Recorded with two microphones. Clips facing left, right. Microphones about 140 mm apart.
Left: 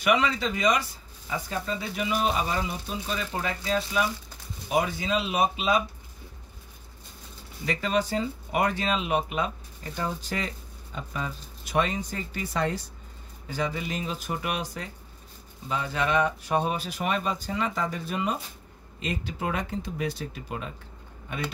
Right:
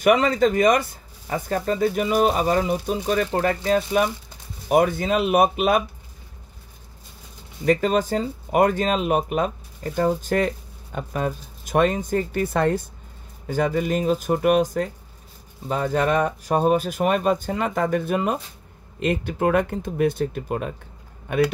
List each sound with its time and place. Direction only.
0.0 s speech: 45° right (ahead or behind)
7.6 s speech: 45° right (ahead or behind)